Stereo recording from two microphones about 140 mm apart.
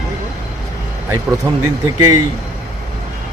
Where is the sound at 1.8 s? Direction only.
25° right (ahead or behind).